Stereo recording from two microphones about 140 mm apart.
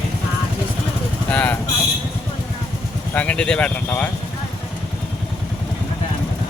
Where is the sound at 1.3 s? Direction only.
10° left (ahead or behind).